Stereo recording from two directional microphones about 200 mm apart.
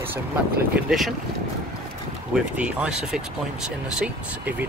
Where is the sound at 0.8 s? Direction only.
Centre (ahead or behind).